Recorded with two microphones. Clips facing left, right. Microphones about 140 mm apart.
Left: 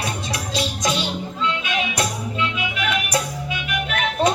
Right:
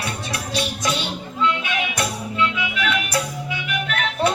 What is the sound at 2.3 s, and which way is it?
Music, 20° left (ahead or behind).